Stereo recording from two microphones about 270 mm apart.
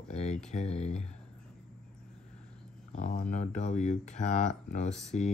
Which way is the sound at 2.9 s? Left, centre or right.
Left.